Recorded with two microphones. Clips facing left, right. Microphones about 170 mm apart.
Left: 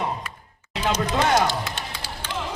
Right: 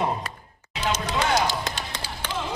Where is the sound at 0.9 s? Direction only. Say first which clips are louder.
Left 3 dB; 55° left (ahead or behind).